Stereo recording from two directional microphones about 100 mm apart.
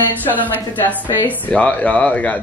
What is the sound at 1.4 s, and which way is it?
Speech, 15° left (ahead or behind).